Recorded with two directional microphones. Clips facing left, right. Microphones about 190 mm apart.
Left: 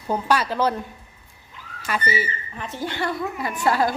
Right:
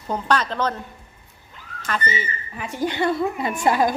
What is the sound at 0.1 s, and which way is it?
Speech, 10° left (ahead or behind).